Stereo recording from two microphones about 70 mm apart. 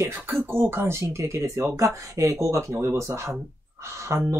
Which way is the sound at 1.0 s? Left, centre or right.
Right.